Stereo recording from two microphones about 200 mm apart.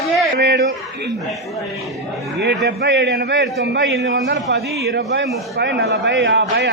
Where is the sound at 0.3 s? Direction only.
50° right (ahead or behind).